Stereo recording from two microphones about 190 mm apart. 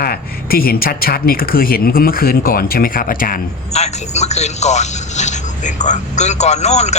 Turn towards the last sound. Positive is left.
turn(degrees=35)  # may be behind; listen again after turning